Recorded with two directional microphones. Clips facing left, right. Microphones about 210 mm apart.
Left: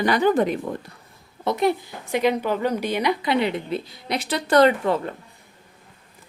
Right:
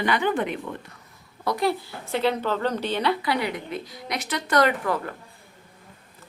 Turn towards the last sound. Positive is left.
turn(degrees=25)  # may be behind; listen again after turning